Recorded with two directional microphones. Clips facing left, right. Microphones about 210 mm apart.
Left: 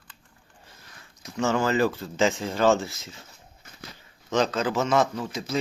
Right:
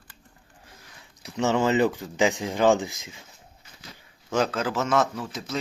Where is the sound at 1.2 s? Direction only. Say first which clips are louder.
Right 1 dB; 20° right (ahead or behind).